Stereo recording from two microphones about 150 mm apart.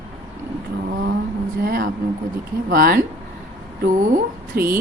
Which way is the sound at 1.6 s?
80° right.